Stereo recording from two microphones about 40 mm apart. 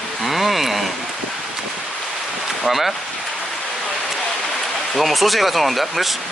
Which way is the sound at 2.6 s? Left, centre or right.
Centre.